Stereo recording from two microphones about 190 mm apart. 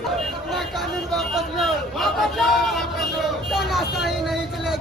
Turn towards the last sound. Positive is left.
turn(degrees=0)  # may be behind; listen again after turning